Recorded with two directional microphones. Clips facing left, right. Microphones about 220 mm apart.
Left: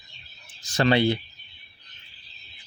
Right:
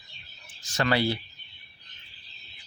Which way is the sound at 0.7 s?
25° left (ahead or behind).